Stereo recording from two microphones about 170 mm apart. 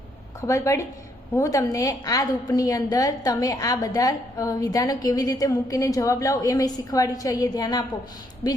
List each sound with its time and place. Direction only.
0.4 s a woman's voice: 15° left (ahead or behind)